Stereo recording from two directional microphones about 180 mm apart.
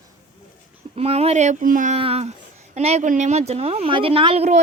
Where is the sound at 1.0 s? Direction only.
35° right (ahead or behind).